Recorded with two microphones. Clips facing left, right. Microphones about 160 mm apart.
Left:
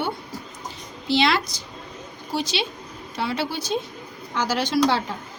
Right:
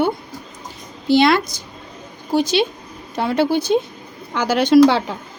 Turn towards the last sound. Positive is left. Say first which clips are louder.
# right 9 dB
turn(degrees=-60)  # may be behind; listen again after turning